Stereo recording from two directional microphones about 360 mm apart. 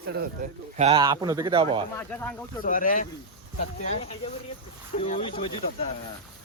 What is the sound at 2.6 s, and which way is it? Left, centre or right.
Speech, left.